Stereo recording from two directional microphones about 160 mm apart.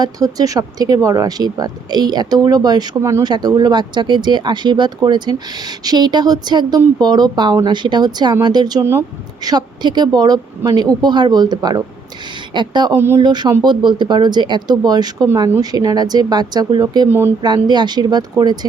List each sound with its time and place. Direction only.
0.0 s speech: 20° right (ahead or behind)
13.0 s speech: 15° right (ahead or behind)
13.2 s speech: 25° right (ahead or behind)
17.1 s speech: 15° right (ahead or behind)
17.4 s speech: 25° right (ahead or behind)